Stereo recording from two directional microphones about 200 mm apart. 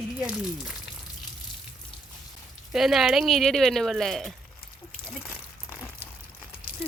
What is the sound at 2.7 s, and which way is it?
Speech, centre (ahead or behind).